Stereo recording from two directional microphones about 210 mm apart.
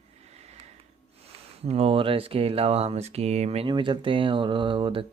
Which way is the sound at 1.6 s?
30° right (ahead or behind).